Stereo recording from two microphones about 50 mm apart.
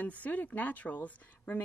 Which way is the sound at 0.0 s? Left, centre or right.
Left.